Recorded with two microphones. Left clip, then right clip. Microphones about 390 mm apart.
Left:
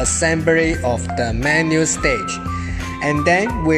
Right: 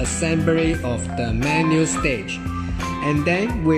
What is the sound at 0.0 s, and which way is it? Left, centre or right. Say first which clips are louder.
Speech: left 5 dB; centre.